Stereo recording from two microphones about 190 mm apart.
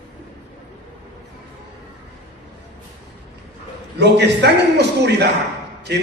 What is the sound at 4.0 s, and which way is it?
A man's voice, 65° right (ahead or behind).